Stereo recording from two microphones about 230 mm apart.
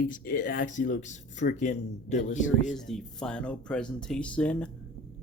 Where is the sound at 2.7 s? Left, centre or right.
Centre.